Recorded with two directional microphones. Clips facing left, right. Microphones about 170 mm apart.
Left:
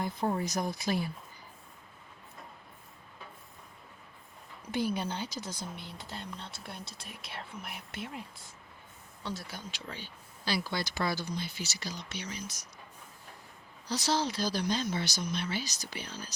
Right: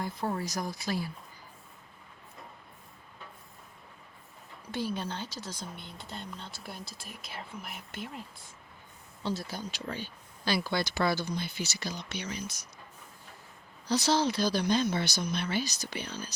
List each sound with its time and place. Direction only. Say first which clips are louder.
0.0 s speech: left 2 dB; 20° left (ahead or behind)
4.7 s speech: left 2 dB; 15° left (ahead or behind)
5.6 s speech: left 1 dB; centre (ahead or behind)
9.2 s speech: right 5 dB; 30° right (ahead or behind)
10.9 s speech: right 3 dB; 70° right (ahead or behind)
13.9 s speech: right 4 dB; 70° right (ahead or behind)